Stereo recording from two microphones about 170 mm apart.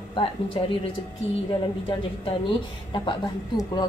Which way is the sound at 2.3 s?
30° left (ahead or behind).